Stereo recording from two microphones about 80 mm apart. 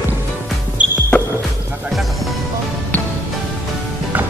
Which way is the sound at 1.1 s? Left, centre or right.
Centre.